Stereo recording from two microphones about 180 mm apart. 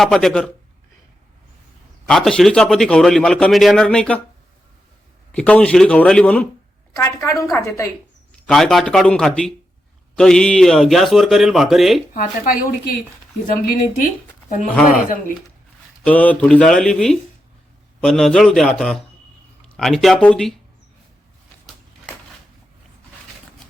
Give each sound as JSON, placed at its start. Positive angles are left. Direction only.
{"t": 0.0, "sound": "a man's voice", "side_deg": 0}
{"t": 2.0, "sound": "a man's voice", "side_deg": 5}
{"t": 5.3, "sound": "a man's voice", "side_deg": 5}
{"t": 8.4, "sound": "a man's voice", "side_deg": 0}
{"t": 12.1, "sound": "a woman's voice", "side_deg": 50}
{"t": 14.7, "sound": "a woman's voice", "side_deg": 10}
{"t": 16.0, "sound": "a man's voice", "side_deg": 10}